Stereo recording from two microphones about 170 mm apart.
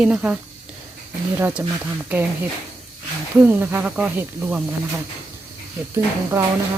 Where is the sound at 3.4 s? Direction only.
10° right (ahead or behind).